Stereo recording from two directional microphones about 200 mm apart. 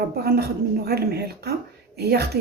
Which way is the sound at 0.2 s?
50° right (ahead or behind).